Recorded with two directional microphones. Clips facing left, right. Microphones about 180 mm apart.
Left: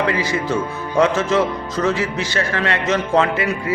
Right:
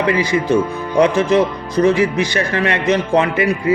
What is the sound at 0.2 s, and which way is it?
A man's voice, 15° right (ahead or behind).